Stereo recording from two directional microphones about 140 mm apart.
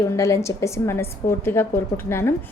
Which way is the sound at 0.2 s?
20° left (ahead or behind).